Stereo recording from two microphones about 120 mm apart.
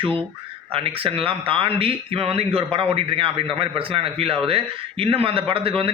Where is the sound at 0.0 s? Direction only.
50° right (ahead or behind).